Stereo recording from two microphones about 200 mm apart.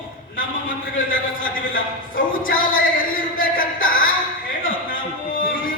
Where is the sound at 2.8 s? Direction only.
45° left (ahead or behind).